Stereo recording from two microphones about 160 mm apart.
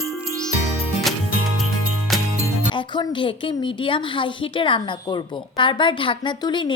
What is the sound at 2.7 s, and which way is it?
A woman's voice, 30° left (ahead or behind).